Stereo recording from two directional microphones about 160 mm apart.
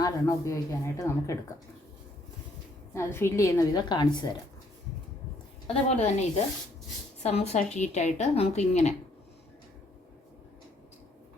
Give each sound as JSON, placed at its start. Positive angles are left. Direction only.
{"t": 0.0, "sound": "speech", "side_deg": 20}
{"t": 2.9, "sound": "speech", "side_deg": 15}
{"t": 5.6, "sound": "a woman's voice", "side_deg": 40}